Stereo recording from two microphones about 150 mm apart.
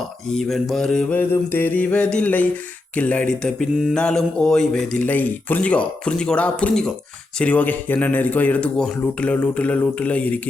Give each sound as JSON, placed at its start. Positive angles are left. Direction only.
{"t": 0.3, "sound": "mantra", "side_deg": 5}